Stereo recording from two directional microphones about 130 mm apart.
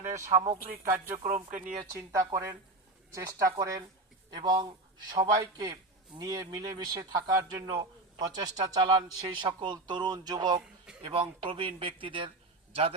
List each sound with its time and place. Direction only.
0.0 s speech: 65° right (ahead or behind)
1.3 s speech: 85° right
1.9 s a man's voice: 25° right (ahead or behind); by 13.0 s 50° right (ahead or behind)